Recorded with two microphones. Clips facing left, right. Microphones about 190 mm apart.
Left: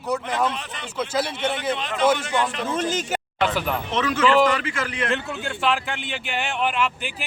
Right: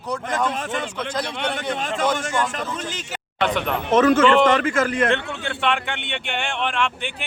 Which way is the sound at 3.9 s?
50° right (ahead or behind).